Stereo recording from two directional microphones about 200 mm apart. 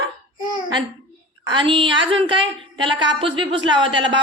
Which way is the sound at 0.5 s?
25° right (ahead or behind).